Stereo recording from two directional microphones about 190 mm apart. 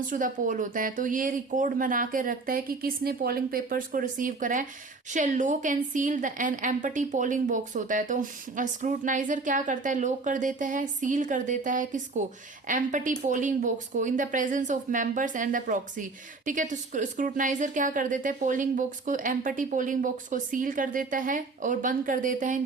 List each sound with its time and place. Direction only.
0.1 s a woman's voice: 45° right (ahead or behind)